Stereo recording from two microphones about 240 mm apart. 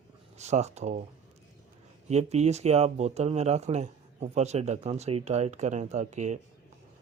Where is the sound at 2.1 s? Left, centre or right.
Right.